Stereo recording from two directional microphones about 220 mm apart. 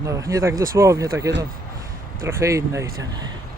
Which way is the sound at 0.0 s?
15° right (ahead or behind).